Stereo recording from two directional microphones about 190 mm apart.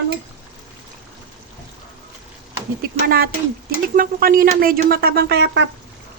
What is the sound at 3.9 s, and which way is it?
Speech, 50° right (ahead or behind).